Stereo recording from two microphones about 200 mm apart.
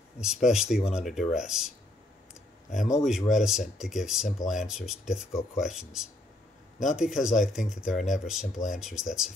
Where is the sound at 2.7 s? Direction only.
Centre (ahead or behind).